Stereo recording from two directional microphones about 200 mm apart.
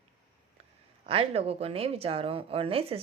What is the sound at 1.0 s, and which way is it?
A woman's voice, 30° right (ahead or behind).